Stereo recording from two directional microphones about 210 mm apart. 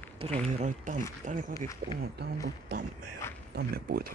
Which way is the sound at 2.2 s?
50° right (ahead or behind).